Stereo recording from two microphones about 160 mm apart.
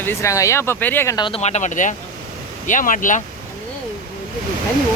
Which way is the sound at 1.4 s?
45° left (ahead or behind).